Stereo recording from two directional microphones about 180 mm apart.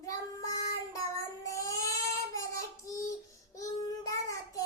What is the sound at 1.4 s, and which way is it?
Child singing, 20° left (ahead or behind).